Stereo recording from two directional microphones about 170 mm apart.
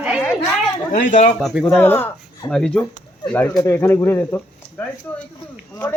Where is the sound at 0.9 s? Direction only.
45° left (ahead or behind).